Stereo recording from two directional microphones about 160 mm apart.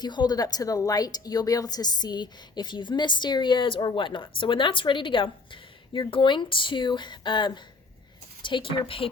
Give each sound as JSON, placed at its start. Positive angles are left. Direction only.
{"t": 0.0, "sound": "a woman's voice", "side_deg": 25}